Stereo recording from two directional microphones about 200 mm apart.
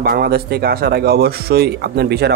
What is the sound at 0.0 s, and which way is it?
Speech, 50° right (ahead or behind).